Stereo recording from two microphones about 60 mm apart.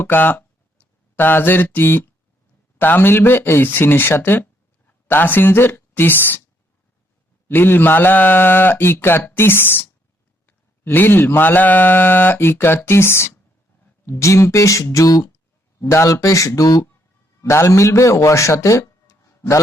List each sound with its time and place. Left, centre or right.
0.0 s mantra: left
4.9 s a woman's voice: left
7.4 s mantra: left
14.1 s a man's voice: left
14.9 s speech: left
15.8 s speech: left
16.2 s a man's voice: left
16.6 s speech: left
17.4 s a man's voice: left
19.0 s a sound: left